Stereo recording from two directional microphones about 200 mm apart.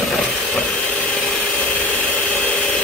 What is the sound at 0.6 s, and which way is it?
Tools, 5° left (ahead or behind).